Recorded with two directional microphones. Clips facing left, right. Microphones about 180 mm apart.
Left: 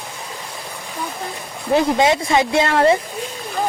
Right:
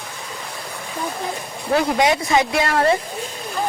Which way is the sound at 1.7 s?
25° left (ahead or behind).